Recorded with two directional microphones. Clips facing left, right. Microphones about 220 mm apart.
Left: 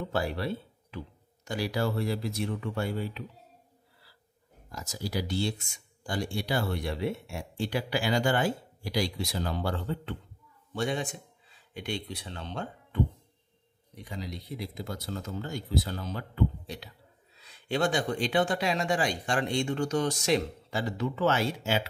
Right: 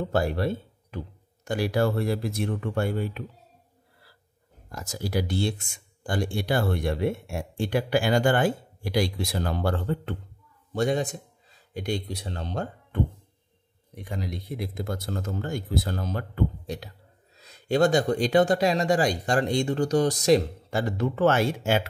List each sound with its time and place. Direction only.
0.1 s speech: 50° right (ahead or behind)
4.6 s speech: 55° right (ahead or behind)
10.7 s speech: 40° right (ahead or behind)
13.9 s speech: 55° right (ahead or behind)